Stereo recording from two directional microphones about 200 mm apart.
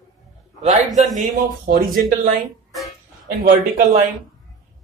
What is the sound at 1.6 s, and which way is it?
Speech, 45° right (ahead or behind).